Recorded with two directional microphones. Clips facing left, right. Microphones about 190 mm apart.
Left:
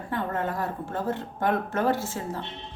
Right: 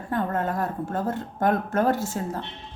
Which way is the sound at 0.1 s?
45° right (ahead or behind).